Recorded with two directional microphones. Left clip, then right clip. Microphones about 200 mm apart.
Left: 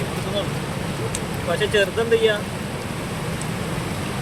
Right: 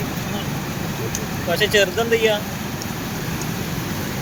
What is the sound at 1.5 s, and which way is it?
Speech, 5° right (ahead or behind).